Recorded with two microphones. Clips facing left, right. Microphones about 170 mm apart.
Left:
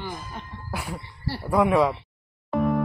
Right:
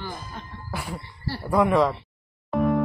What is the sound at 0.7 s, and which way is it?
Speech, centre (ahead or behind).